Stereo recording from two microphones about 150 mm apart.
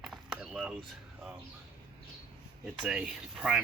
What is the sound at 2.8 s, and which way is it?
Speech, 5° right (ahead or behind).